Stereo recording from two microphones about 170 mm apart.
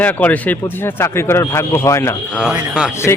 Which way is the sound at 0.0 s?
10° left (ahead or behind).